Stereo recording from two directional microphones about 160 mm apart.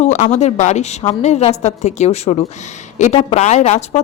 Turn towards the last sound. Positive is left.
turn(degrees=40)  # may be behind; listen again after turning